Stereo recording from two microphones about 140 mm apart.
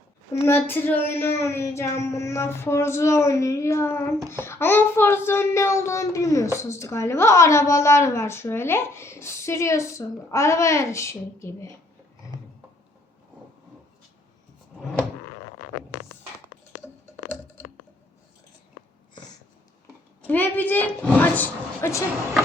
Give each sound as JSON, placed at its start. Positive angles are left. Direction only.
{"t": 0.4, "sound": "a child's voice", "side_deg": 15}
{"t": 20.2, "sound": "speech", "side_deg": 10}